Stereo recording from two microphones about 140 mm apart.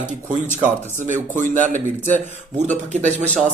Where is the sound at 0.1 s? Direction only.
65° right (ahead or behind).